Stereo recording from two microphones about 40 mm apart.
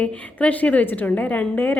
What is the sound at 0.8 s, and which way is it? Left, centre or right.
Speech, left.